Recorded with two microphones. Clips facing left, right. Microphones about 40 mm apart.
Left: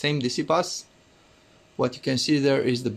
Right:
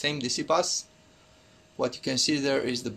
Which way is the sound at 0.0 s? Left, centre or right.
Centre.